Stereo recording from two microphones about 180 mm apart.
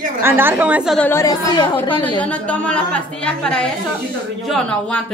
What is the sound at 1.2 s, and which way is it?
A woman's voice, 20° left (ahead or behind).